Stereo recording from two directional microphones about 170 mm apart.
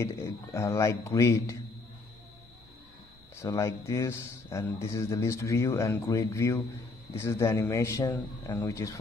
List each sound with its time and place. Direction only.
0.0 s a man's voice: 15° left (ahead or behind)
3.3 s a man's voice: 20° left (ahead or behind)